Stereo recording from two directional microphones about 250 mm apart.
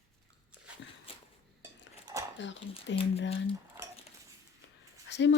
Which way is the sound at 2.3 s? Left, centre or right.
Left.